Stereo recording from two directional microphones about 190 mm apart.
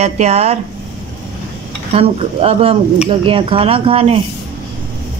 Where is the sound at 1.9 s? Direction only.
30° right (ahead or behind).